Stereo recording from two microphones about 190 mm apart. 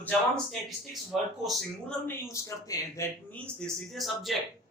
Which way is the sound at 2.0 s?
15° left (ahead or behind).